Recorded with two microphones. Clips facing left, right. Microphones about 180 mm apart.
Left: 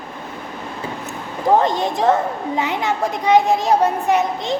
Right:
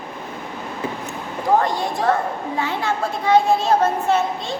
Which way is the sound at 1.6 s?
20° left (ahead or behind).